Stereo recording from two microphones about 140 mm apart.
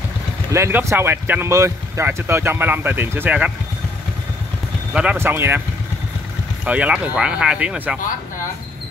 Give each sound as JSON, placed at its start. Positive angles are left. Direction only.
{"t": 0.5, "sound": "speech", "side_deg": -20}
{"t": 5.1, "sound": "speech", "side_deg": -15}
{"t": 6.6, "sound": "speech", "side_deg": -10}